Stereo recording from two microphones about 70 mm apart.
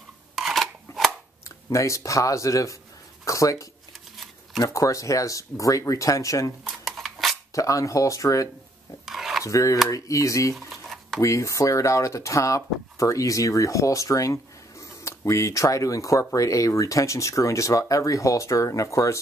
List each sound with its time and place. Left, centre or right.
0.4 s scissors: centre
1.7 s speech: left
6.8 s a sound: centre
7.5 s speech: left
9.0 s a sound: centre
9.4 s speech: left
10.5 s dishes: centre
11.1 s speech: left